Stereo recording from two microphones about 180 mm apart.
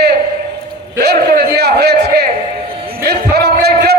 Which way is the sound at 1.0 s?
60° right (ahead or behind).